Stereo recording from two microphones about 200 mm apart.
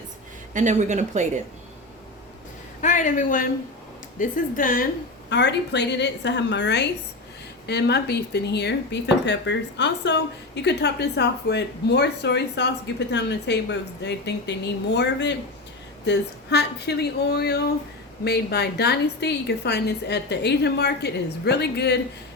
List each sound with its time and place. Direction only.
0.5 s speech: 40° right (ahead or behind)
2.8 s a man's voice: 40° left (ahead or behind)
5.3 s speech: 60° left (ahead or behind)